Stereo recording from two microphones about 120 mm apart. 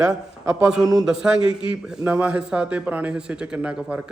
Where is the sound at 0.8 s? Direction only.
30° right (ahead or behind).